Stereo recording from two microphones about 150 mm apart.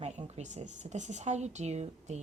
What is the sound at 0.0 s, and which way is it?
Speech, 50° right (ahead or behind).